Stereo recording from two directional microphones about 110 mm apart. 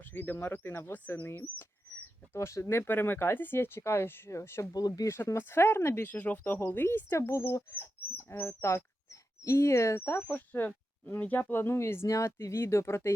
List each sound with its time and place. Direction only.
0.0 s speech: 15° left (ahead or behind)
4.7 s speech: 35° left (ahead or behind)